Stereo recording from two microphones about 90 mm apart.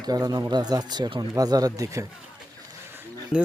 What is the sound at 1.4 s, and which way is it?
Speech, 45° right (ahead or behind).